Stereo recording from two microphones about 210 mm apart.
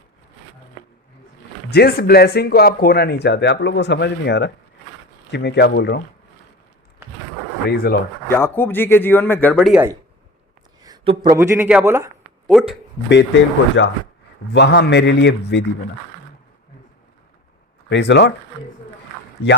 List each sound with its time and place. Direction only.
1.7 s speech: 50° left (ahead or behind)
7.7 s speech: 50° left (ahead or behind)
8.3 s a man's voice: 10° left (ahead or behind)
9.6 s speech: 5° right (ahead or behind)
10.8 s speech: 25° right (ahead or behind)
12.5 s speech: centre (ahead or behind)
13.8 s a man's voice: 65° left (ahead or behind)
17.8 s a man's voice: 55° left (ahead or behind)